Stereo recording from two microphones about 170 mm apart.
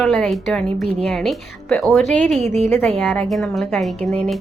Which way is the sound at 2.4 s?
40° right (ahead or behind).